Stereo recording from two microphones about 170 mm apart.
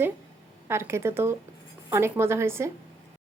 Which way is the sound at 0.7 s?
15° right (ahead or behind).